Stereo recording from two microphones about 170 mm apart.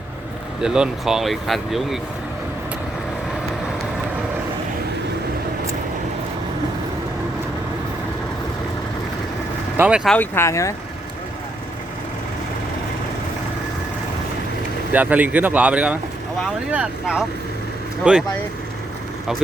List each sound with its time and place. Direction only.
0.6 s speech: 5° right (ahead or behind)
9.7 s speech: 10° right (ahead or behind)
10.1 s speech: 10° left (ahead or behind)
14.9 s speech: 10° right (ahead or behind)